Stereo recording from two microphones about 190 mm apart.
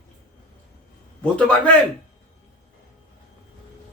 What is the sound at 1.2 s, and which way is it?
Speech, 5° left (ahead or behind).